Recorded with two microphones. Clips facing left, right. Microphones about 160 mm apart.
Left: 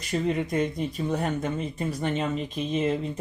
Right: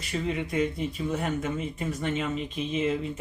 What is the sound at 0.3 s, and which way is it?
Speech, 40° left (ahead or behind).